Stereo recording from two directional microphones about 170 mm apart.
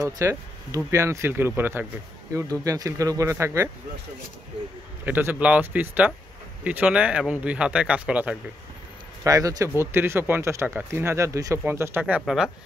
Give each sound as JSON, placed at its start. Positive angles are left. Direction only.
{"t": 0.0, "sound": "speech", "side_deg": -15}
{"t": 5.0, "sound": "speech", "side_deg": -10}
{"t": 9.2, "sound": "speech", "side_deg": -20}